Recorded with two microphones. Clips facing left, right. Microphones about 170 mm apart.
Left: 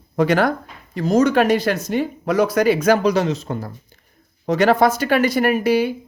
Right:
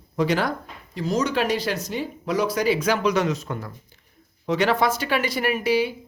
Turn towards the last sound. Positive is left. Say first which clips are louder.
# left 5 dB
turn(degrees=50)  # may be behind; listen again after turning